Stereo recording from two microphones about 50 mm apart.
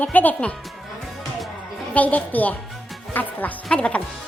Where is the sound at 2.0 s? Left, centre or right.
Left.